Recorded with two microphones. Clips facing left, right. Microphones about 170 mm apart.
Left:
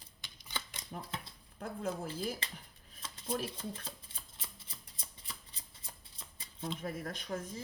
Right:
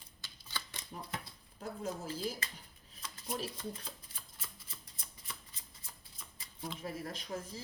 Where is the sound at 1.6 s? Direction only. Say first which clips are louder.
Left 2 dB; 55° left (ahead or behind).